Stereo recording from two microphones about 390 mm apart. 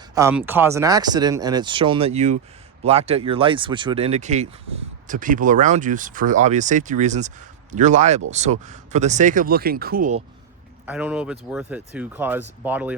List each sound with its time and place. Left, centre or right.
0.1 s speech: centre
10.8 s speech: centre